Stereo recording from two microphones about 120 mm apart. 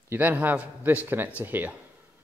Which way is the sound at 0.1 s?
15° right (ahead or behind).